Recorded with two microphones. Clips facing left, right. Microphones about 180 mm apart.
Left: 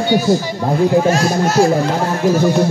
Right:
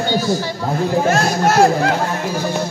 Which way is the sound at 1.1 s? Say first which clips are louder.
Left 1 dB; 60° right (ahead or behind).